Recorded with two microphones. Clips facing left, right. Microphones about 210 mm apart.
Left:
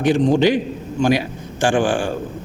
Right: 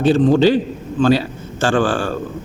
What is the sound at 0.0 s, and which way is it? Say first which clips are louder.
A man's voice: right 2 dB; 15° left (ahead or behind).